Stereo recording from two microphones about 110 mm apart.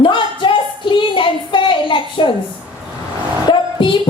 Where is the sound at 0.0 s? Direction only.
50° left (ahead or behind).